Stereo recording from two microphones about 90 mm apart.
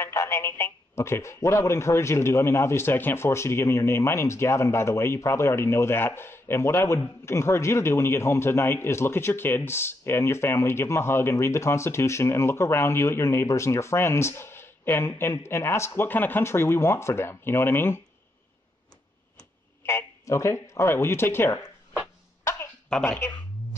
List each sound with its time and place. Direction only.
0.0 s speech: 30° left (ahead or behind)
19.9 s speech: 35° left (ahead or behind)
22.4 s a sound: 30° left (ahead or behind)
23.0 s speech: 25° left (ahead or behind)